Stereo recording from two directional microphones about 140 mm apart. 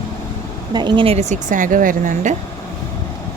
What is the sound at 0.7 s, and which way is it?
A woman's voice, 30° right (ahead or behind).